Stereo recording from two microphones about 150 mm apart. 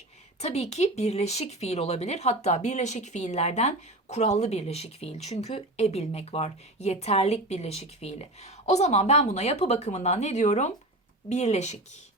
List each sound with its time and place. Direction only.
0.3 s a woman's voice: 45° left (ahead or behind)